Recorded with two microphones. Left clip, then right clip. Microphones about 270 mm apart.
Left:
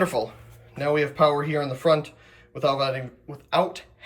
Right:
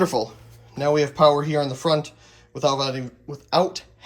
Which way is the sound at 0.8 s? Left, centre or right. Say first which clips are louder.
Right 3 dB; centre.